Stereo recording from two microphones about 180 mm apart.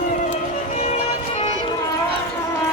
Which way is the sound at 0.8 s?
35° left (ahead or behind).